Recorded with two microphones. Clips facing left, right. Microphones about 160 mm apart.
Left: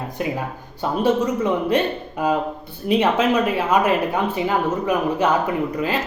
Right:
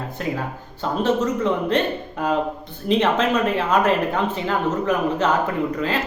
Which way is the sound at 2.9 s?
10° left (ahead or behind).